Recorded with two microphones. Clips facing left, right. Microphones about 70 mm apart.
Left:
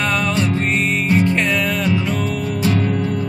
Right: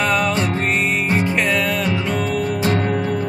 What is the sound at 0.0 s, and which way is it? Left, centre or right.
Music, centre.